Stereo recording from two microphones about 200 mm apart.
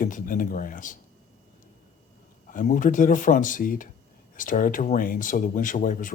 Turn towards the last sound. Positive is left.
turn(degrees=40)  # may be behind; listen again after turning